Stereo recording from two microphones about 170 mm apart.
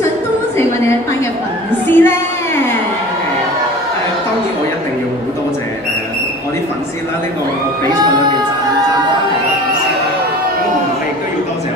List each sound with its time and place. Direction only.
1.9 s music: 15° left (ahead or behind)